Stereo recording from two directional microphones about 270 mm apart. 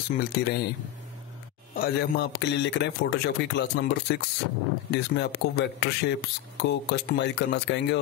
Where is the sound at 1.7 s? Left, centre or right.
Left.